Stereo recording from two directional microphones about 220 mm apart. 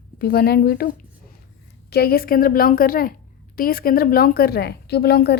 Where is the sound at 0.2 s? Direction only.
45° left (ahead or behind).